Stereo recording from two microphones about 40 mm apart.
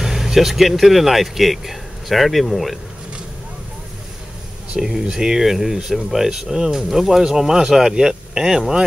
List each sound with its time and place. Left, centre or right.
0.0 s speech: centre
4.7 s speech: centre